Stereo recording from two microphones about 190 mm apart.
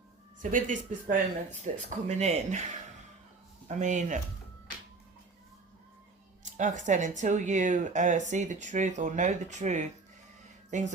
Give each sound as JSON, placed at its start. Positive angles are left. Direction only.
{"t": 0.3, "sound": "speech", "side_deg": -45}
{"t": 6.4, "sound": "speech", "side_deg": -40}